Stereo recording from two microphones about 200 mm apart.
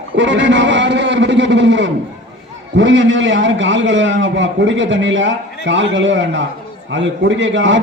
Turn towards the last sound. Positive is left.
turn(degrees=-65)  # may be behind; listen again after turning